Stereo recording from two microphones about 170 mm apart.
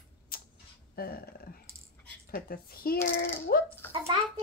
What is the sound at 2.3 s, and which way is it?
A woman's voice, 60° left (ahead or behind).